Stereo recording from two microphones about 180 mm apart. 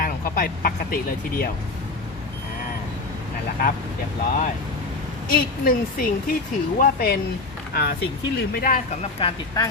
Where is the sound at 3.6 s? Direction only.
55° left (ahead or behind).